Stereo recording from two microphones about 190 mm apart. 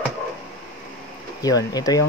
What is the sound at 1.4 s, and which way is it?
Speech, 20° left (ahead or behind).